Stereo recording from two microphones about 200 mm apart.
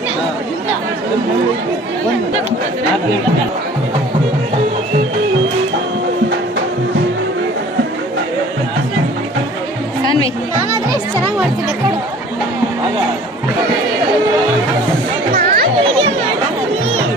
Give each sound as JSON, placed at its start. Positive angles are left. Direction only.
{"t": 15.3, "sound": "music", "side_deg": -50}
{"t": 15.8, "sound": "chatter", "side_deg": -25}